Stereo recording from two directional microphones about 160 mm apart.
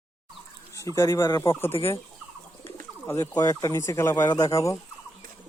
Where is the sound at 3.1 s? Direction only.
20° left (ahead or behind).